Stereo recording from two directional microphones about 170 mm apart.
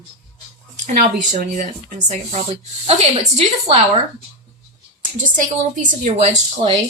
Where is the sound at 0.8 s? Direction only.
50° right (ahead or behind).